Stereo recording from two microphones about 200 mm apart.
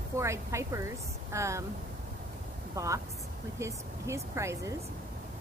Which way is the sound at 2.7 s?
15° right (ahead or behind).